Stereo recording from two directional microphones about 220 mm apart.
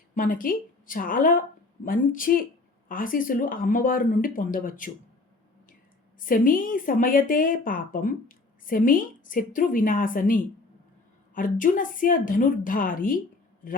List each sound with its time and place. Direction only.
0.1 s a woman's voice: 40° left (ahead or behind)
6.1 s a woman's voice: 40° left (ahead or behind)